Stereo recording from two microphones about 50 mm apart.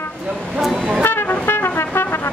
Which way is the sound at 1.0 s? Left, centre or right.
Left.